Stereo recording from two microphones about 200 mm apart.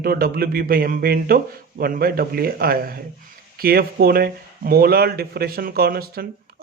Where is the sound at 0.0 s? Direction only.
50° right (ahead or behind).